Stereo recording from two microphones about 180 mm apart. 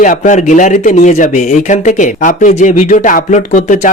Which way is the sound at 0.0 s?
45° left (ahead or behind).